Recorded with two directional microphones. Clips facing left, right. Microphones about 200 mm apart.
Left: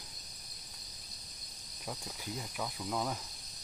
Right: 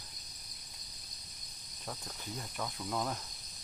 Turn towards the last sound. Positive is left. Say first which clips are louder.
# even
turn(degrees=5)  # may be behind; listen again after turning